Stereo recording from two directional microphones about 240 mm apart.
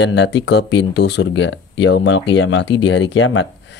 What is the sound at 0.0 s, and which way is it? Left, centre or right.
Speech, left.